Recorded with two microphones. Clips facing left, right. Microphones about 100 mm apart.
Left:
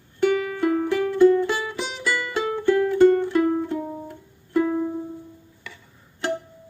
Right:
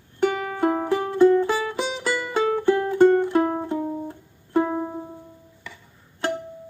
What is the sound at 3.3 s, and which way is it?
Music, 45° right (ahead or behind).